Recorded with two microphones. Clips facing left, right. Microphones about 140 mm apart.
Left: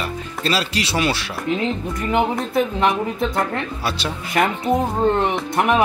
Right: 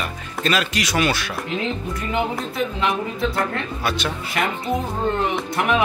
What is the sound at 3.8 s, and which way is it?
Speech, 30° left (ahead or behind).